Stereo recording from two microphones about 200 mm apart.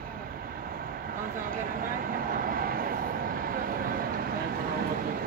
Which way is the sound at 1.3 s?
45° right (ahead or behind).